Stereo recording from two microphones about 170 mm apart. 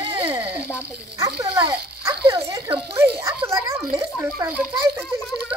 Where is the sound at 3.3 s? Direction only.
15° right (ahead or behind).